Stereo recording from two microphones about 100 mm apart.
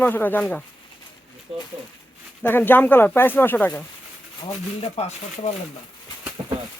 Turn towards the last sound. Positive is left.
turn(degrees=-40)  # may be behind; listen again after turning